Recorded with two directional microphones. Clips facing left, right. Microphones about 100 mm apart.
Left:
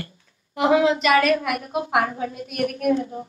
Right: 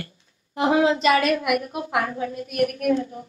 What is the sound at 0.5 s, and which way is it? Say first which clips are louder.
Speech: left 1 dB; 30° right (ahead or behind).